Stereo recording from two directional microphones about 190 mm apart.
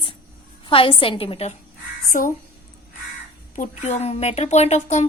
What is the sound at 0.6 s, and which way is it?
Speech, 25° left (ahead or behind).